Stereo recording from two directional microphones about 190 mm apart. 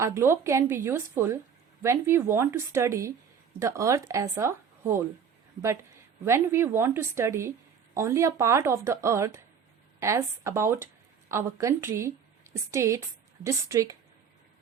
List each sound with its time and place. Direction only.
0.0 s speech: 15° right (ahead or behind)
6.2 s speech: 15° right (ahead or behind)